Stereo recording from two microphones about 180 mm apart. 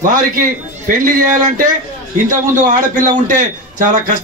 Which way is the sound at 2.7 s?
45° right (ahead or behind).